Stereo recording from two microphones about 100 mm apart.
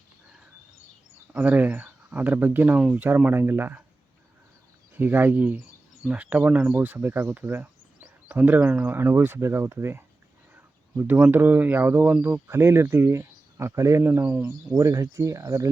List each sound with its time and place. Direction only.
1.3 s speech: 15° right (ahead or behind)
4.9 s speech: 20° right (ahead or behind)
12.5 s speech: 25° right (ahead or behind)
14.8 s speech: 30° right (ahead or behind)